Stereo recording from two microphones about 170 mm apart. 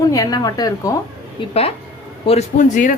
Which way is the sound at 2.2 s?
40° left (ahead or behind).